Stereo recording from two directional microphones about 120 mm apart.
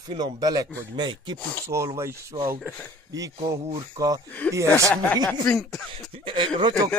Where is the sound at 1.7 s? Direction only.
25° right (ahead or behind).